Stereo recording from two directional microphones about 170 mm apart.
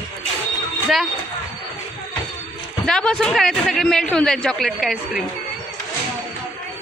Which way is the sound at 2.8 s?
5° left (ahead or behind).